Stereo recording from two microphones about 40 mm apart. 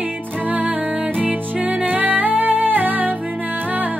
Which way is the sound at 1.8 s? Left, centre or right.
Right.